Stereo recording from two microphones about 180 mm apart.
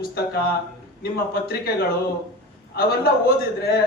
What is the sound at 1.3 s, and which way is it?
Speech, 55° left (ahead or behind).